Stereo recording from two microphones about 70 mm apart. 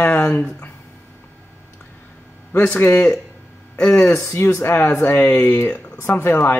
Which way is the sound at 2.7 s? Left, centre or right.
Left.